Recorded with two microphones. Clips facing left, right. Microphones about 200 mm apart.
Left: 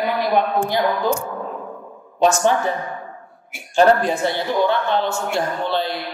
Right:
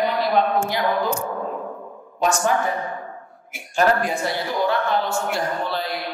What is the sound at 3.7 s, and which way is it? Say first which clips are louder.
Speech: left 5 dB; 30° left (ahead or behind).